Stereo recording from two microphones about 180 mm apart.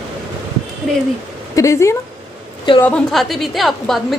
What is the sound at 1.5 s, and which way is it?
Speech, 15° left (ahead or behind).